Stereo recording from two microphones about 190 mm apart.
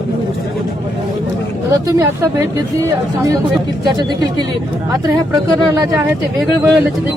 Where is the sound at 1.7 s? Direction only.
20° right (ahead or behind).